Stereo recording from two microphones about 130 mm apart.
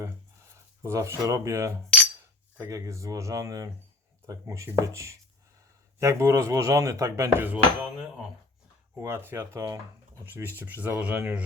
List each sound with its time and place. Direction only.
0.8 s cutlery: 20° right (ahead or behind)
10.2 s speech: 15° right (ahead or behind)